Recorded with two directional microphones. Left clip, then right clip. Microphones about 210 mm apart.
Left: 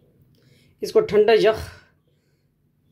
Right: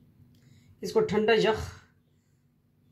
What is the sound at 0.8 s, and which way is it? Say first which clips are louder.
Speech: left 9 dB; 50° left (ahead or behind).